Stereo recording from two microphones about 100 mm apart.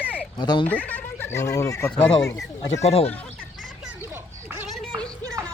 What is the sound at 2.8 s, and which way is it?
Speech, 80° left.